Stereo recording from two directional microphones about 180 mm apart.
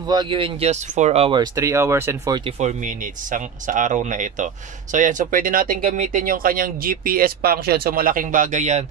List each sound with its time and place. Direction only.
0.1 s speech: 25° right (ahead or behind)
2.4 s speech: 40° right (ahead or behind)